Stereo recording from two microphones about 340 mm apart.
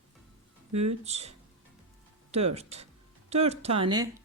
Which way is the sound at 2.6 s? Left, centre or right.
Centre.